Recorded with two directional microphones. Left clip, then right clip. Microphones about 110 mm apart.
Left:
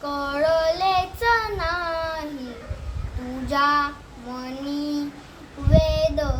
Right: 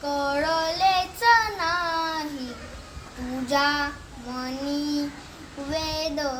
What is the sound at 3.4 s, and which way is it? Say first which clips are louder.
Child singing: left 3 dB; 20° left (ahead or behind).